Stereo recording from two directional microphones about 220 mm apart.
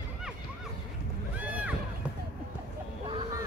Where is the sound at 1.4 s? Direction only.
5° right (ahead or behind).